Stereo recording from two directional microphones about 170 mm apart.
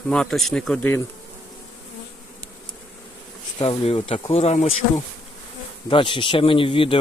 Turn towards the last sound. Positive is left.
turn(degrees=30)  # may be behind; listen again after turning